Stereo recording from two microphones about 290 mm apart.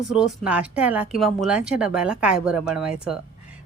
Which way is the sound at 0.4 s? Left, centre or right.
Centre.